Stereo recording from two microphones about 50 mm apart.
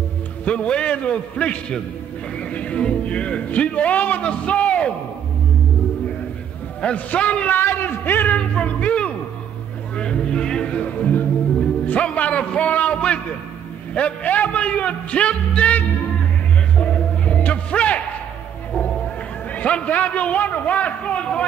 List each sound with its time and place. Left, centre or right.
0.5 s a man's voice: left
7.1 s a man's voice: left
7.4 s a man's voice: left
8.4 s a man's voice: left
16.7 s music: left
19.5 s a man's voice: left